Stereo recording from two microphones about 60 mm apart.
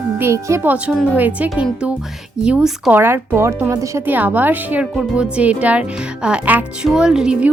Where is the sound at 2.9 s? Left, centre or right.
Right; by 7.3 s centre.